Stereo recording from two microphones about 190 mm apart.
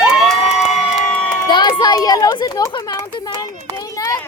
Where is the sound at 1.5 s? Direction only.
25° left (ahead or behind).